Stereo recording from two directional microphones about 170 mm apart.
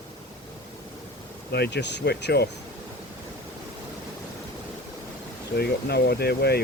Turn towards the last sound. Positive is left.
turn(degrees=70)  # may be behind; listen again after turning